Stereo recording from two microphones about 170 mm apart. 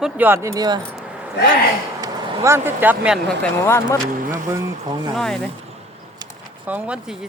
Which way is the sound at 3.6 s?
15° left (ahead or behind).